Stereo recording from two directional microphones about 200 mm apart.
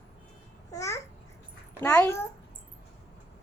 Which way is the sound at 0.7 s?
15° left (ahead or behind).